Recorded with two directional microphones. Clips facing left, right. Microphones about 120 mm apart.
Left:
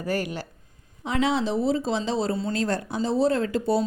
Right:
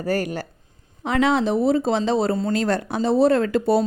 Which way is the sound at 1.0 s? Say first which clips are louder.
Right 5 dB; 60° right (ahead or behind).